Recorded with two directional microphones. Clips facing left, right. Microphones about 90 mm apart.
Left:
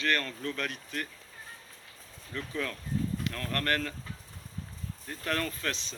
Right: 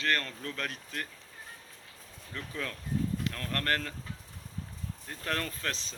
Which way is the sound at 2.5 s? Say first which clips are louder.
Left 1 dB; 30° right (ahead or behind).